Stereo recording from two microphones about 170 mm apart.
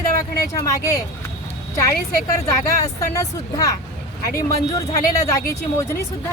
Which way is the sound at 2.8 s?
20° left (ahead or behind).